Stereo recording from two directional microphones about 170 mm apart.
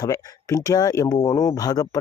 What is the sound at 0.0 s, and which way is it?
Speech, 20° left (ahead or behind).